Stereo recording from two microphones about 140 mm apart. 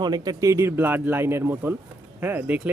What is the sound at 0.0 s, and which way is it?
A man's voice, 30° right (ahead or behind).